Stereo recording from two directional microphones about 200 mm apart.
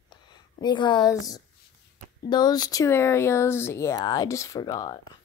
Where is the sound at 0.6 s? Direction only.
20° left (ahead or behind).